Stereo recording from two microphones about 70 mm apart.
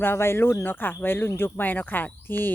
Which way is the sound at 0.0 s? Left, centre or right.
Left.